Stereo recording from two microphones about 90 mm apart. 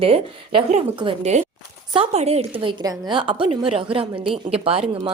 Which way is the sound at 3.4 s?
90° right.